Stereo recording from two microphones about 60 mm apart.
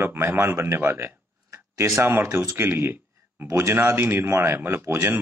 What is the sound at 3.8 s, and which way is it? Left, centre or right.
Speech, right.